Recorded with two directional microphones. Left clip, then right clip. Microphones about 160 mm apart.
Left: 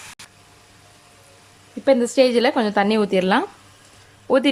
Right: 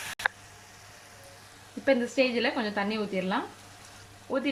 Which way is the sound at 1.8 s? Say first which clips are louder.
Left 9 dB; 25° left (ahead or behind).